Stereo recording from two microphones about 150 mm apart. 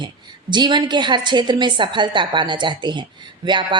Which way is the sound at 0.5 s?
30° right (ahead or behind).